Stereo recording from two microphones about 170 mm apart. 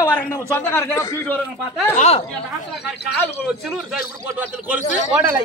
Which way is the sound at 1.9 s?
40° left (ahead or behind).